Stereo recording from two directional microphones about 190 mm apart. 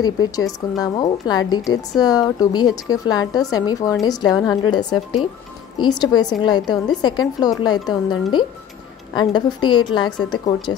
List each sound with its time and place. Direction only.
0.0 s a woman's voice: 20° left (ahead or behind)